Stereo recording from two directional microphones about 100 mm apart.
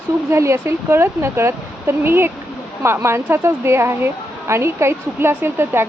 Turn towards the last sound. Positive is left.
turn(degrees=-25)  # may be behind; listen again after turning